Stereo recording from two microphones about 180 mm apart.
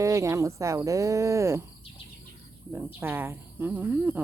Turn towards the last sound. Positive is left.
turn(degrees=-10)  # may be behind; listen again after turning